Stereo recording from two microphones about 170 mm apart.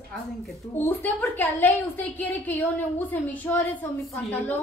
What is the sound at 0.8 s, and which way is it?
A woman's voice, 10° left (ahead or behind).